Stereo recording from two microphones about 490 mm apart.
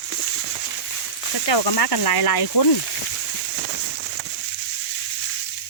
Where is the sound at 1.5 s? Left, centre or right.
Left.